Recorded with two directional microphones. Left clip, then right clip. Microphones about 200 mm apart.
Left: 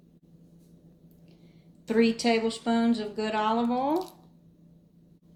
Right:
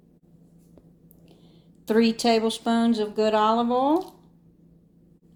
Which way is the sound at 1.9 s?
40° right (ahead or behind).